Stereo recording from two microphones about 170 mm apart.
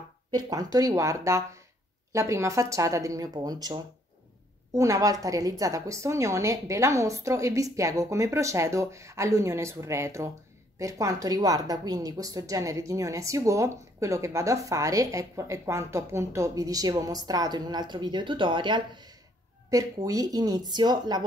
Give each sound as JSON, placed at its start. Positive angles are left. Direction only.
{"t": 0.3, "sound": "a woman's voice", "side_deg": -20}